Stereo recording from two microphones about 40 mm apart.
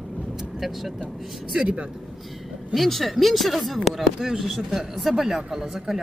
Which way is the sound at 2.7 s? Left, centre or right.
Centre.